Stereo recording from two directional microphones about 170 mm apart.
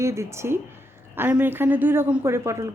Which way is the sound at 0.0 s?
15° right (ahead or behind).